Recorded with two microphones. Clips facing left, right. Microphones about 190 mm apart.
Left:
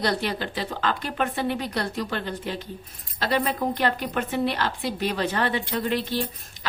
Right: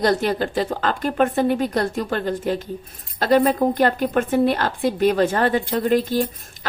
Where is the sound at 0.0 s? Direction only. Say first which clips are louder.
Right 7 dB; 45° right (ahead or behind).